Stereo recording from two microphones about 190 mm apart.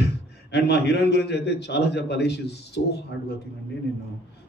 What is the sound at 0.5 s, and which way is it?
A man's voice, 60° left (ahead or behind).